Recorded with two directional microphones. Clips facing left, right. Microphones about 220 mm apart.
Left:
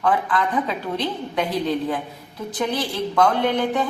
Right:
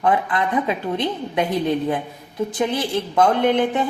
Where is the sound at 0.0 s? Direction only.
20° right (ahead or behind).